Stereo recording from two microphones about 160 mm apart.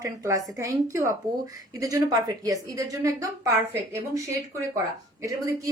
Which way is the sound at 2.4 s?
20° right (ahead or behind).